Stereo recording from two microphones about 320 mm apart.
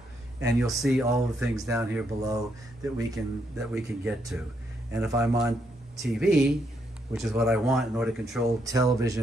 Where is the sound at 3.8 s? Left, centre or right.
Centre.